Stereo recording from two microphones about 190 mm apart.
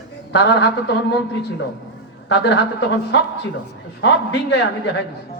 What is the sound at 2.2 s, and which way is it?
Speech, 75° left (ahead or behind).